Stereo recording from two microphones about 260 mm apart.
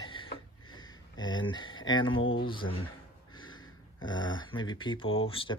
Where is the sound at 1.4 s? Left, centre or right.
Centre.